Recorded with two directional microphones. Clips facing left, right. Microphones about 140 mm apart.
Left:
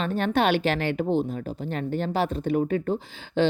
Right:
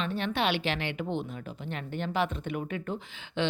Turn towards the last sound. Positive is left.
turn(degrees=40)  # may be behind; listen again after turning